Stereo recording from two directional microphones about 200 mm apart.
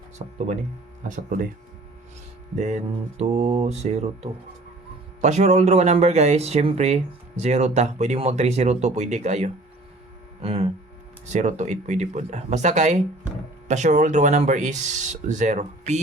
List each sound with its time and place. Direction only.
0.2 s speech: 35° right (ahead or behind)
2.6 s speech: 35° right (ahead or behind)
10.4 s hum: 30° right (ahead or behind)
11.3 s speech: 35° right (ahead or behind)